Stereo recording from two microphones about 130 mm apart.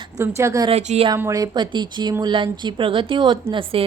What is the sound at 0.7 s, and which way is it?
Speech, 55° right (ahead or behind).